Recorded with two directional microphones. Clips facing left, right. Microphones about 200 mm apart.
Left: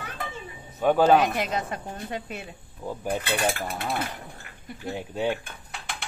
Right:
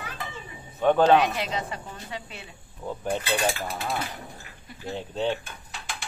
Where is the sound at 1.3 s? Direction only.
50° left (ahead or behind).